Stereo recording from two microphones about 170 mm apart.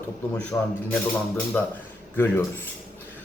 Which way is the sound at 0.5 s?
15° left (ahead or behind).